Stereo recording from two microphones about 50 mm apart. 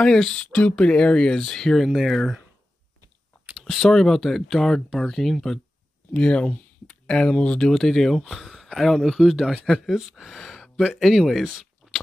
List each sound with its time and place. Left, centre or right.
0.0 s speech: centre
0.4 s speech: left
1.5 s speech: centre
3.6 s speech: centre
6.1 s speech: left
6.9 s a sound: centre
7.2 s speech: left
7.7 s speech: centre
11.8 s crunch: centre